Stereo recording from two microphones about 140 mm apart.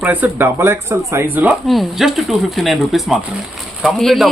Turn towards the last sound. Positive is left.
turn(degrees=0)  # may be behind; listen again after turning